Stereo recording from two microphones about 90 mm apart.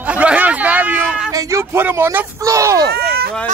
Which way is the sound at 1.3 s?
35° right (ahead or behind).